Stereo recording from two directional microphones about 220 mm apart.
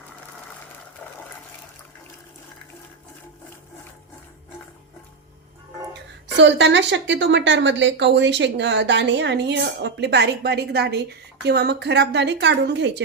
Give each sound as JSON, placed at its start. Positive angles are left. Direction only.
{"t": 5.9, "sound": "a woman's voice", "side_deg": -55}